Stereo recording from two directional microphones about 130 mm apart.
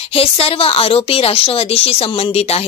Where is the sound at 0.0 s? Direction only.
50° left (ahead or behind).